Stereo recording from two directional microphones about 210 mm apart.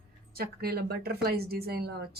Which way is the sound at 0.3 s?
45° right (ahead or behind).